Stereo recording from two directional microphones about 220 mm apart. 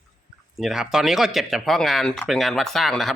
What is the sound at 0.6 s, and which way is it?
Speech, centre (ahead or behind).